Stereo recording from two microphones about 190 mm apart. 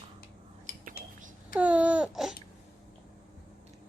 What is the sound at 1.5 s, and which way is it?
Babbling, 5° right (ahead or behind).